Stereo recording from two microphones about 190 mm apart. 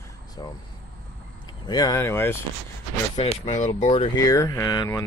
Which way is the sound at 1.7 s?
20° left (ahead or behind).